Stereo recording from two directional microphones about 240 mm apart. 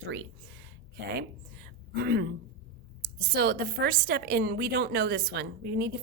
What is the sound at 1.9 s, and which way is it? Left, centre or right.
Speech, right.